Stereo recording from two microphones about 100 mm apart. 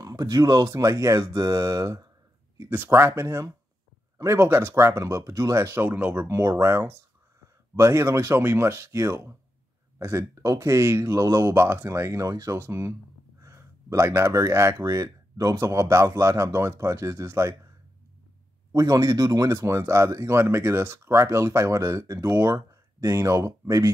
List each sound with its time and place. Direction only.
0.0 s speech: 35° right (ahead or behind)
2.7 s speech: 20° right (ahead or behind)
5.9 s speech: 15° right (ahead or behind)
6.2 s speech: 30° right (ahead or behind)
18.7 s speech: 35° right (ahead or behind)